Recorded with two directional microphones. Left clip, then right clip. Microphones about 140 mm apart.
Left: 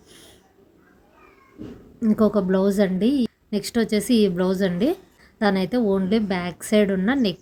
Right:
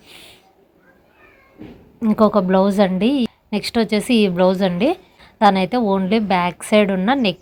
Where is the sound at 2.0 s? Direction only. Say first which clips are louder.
Right 5 dB; 20° right (ahead or behind).